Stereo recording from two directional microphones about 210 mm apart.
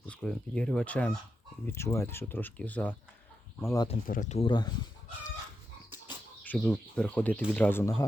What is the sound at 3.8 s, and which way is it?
Speech, 35° left (ahead or behind).